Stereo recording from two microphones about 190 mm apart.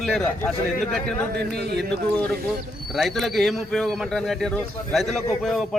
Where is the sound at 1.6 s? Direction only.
60° right (ahead or behind).